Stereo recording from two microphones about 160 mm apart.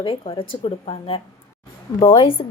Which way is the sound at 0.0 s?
35° left (ahead or behind).